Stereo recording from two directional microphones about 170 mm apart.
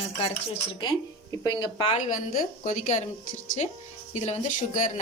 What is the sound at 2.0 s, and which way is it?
Speech, 50° left (ahead or behind).